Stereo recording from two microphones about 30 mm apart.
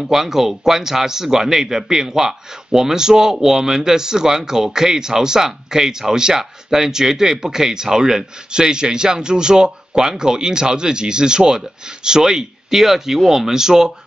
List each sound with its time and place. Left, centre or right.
0.0 s a man's voice: centre